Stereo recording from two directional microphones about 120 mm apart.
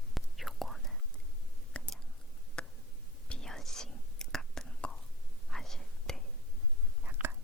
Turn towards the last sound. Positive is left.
turn(degrees=-15)  # may be behind; listen again after turning